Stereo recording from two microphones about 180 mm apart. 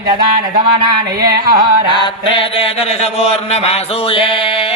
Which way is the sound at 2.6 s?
35° left (ahead or behind).